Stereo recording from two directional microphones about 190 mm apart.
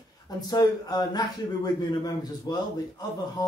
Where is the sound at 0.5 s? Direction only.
20° left (ahead or behind).